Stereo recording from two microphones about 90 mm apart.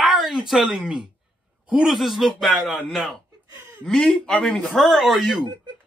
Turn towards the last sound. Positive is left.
turn(degrees=0)  # may be behind; listen again after turning